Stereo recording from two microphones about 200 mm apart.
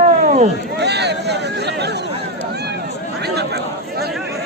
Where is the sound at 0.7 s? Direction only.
55° right (ahead or behind).